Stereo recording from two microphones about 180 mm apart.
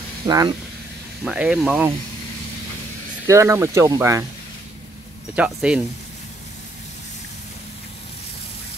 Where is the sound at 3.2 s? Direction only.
15° right (ahead or behind).